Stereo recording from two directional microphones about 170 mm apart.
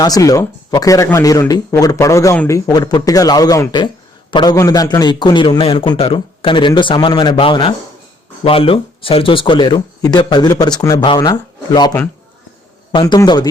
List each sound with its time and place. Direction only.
0.0 s speech: 20° left (ahead or behind)
12.9 s speech: 25° left (ahead or behind)